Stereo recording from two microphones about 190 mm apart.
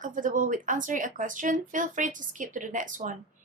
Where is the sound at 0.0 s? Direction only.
45° right (ahead or behind).